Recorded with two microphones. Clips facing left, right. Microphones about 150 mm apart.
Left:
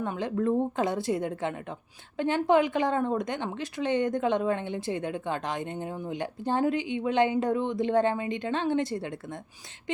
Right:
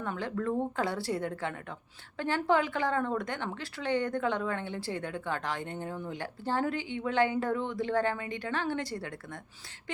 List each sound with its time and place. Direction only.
0.0 s a woman's voice: 20° left (ahead or behind)